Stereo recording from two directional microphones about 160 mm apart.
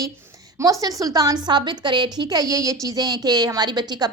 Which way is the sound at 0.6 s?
20° right (ahead or behind).